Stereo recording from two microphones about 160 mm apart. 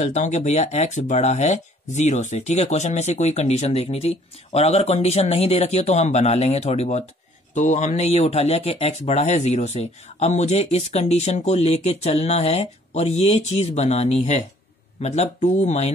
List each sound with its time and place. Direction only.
0.0 s speech: 45° left (ahead or behind)